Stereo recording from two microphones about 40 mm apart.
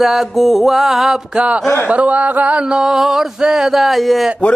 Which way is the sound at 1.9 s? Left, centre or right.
Right.